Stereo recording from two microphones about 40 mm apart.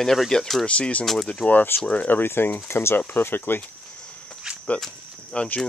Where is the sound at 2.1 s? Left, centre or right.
Left.